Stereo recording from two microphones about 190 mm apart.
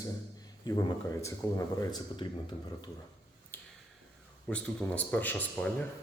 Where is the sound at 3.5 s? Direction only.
10° left (ahead or behind).